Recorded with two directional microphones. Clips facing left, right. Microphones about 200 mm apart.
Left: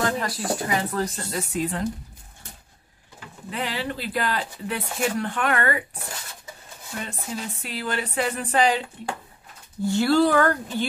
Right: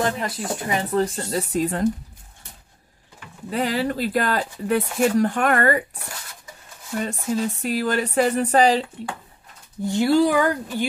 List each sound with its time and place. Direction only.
0.0 s speech: 25° right (ahead or behind); by 1.9 s 40° right (ahead or behind)
3.4 s speech: 40° right (ahead or behind)
7.0 s speech: 45° right (ahead or behind)
9.8 s speech: 15° right (ahead or behind)